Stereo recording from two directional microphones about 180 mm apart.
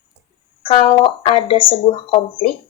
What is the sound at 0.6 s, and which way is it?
A woman's voice, 30° left (ahead or behind).